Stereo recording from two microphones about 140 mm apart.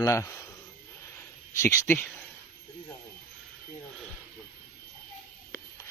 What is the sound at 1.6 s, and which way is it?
Speech, 20° left (ahead or behind).